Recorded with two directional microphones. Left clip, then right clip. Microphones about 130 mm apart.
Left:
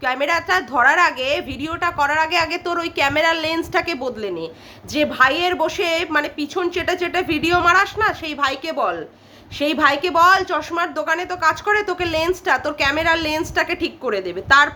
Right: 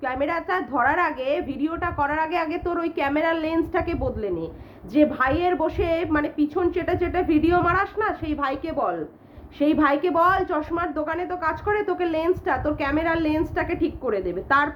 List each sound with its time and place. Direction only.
0.0 s a woman's voice: 15° left (ahead or behind)